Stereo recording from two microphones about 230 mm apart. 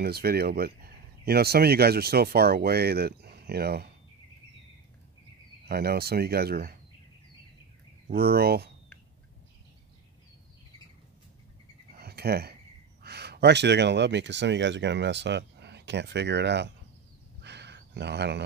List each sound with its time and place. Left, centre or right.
0.0 s speech: right
5.7 s speech: right
8.1 s speech: right
12.0 s a sound: right
13.0 s speech: right
17.4 s a sound: right